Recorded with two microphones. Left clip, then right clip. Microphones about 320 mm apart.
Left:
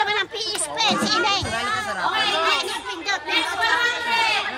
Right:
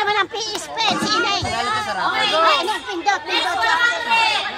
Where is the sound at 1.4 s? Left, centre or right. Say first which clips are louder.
Right 3 dB; right.